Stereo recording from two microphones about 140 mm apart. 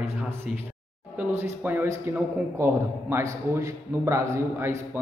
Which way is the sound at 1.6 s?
15° right (ahead or behind).